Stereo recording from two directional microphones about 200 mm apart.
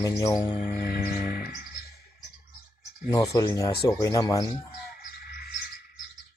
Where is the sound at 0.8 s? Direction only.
50° left (ahead or behind).